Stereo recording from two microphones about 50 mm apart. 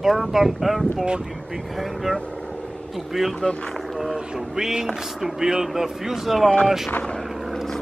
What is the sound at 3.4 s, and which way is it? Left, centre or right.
Speech, centre.